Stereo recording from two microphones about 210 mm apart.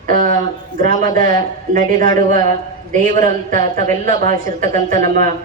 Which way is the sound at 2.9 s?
40° right (ahead or behind).